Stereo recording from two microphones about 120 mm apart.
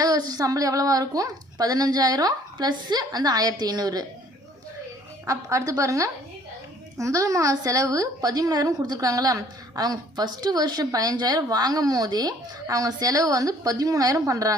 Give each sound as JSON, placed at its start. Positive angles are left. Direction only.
{"t": 0.0, "sound": "a woman's voice", "side_deg": -30}
{"t": 5.2, "sound": "a woman's voice", "side_deg": -25}